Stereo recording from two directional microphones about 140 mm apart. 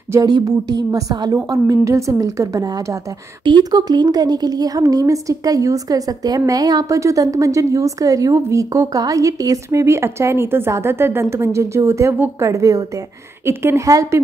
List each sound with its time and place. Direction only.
0.1 s speech: 25° right (ahead or behind)